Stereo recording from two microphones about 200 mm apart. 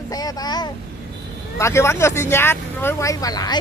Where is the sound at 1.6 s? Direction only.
15° left (ahead or behind).